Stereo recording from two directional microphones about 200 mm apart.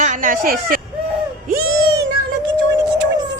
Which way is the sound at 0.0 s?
40° right (ahead or behind).